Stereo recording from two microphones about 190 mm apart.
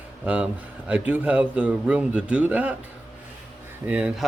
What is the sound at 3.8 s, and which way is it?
Speech, 5° right (ahead or behind).